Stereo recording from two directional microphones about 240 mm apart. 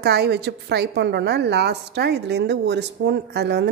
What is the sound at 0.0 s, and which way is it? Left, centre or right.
A woman's voice, right.